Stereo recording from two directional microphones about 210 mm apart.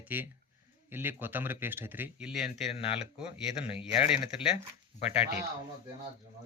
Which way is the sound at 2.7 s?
25° left (ahead or behind).